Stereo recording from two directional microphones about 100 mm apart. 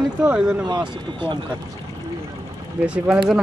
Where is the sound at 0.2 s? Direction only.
10° right (ahead or behind).